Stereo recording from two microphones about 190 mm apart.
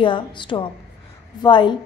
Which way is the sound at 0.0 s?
25° left (ahead or behind).